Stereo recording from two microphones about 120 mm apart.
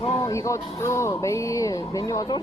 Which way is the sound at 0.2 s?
25° left (ahead or behind).